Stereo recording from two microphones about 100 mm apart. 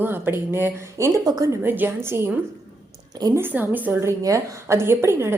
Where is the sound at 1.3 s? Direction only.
40° right (ahead or behind).